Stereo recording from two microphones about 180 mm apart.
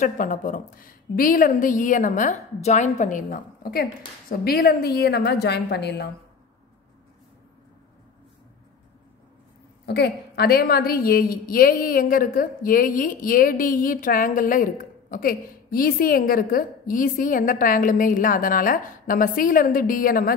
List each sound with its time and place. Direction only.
0.0 s a woman's voice: 45° left (ahead or behind); by 6.0 s 65° left (ahead or behind)
9.8 s a woman's voice: 65° left (ahead or behind)